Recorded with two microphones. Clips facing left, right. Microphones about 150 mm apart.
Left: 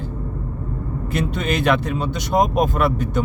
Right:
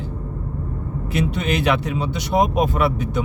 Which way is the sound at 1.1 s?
50° left (ahead or behind).